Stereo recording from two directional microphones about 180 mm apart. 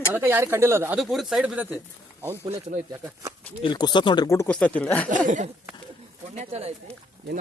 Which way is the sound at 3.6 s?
25° left (ahead or behind).